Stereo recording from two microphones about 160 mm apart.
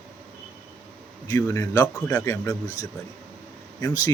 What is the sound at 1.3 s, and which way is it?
A man's voice, 15° left (ahead or behind).